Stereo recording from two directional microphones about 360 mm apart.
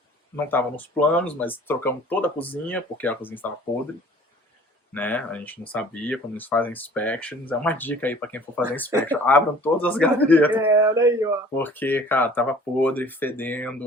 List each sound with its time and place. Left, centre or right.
0.3 s speech: centre
4.9 s speech: centre
10.6 s speech: centre
11.5 s speech: centre